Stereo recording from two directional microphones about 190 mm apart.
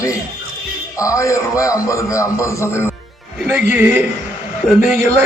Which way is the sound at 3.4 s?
10° right (ahead or behind).